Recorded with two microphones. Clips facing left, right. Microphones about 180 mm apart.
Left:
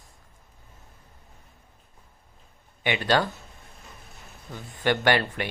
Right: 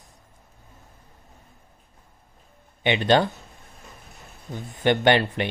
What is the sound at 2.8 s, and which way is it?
Speech, 25° right (ahead or behind).